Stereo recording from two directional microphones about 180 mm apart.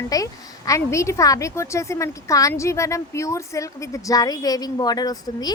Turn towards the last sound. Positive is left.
turn(degrees=20)  # may be behind; listen again after turning